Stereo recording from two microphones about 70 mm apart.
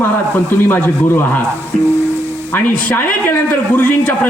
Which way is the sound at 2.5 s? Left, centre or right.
Left.